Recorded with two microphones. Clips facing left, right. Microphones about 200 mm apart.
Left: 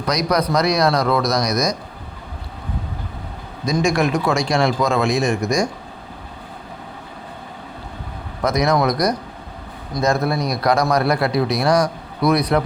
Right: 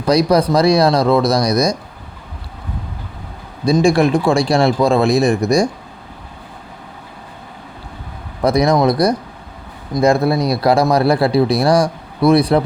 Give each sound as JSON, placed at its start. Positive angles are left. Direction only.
{"t": 0.0, "sound": "a man's voice", "side_deg": -30}
{"t": 3.7, "sound": "a man's voice", "side_deg": -30}
{"t": 8.4, "sound": "a man's voice", "side_deg": -30}